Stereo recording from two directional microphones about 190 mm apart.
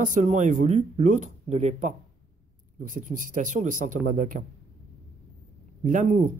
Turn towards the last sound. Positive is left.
turn(degrees=-40)  # may be behind; listen again after turning